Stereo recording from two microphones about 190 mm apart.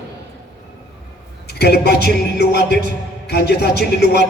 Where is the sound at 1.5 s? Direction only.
60° left (ahead or behind).